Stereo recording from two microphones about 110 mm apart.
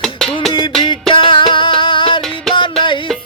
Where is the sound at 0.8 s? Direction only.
50° left (ahead or behind).